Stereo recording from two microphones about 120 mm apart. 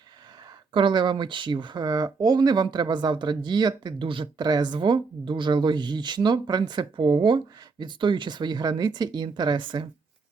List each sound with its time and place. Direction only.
0.7 s speech: 45° right (ahead or behind)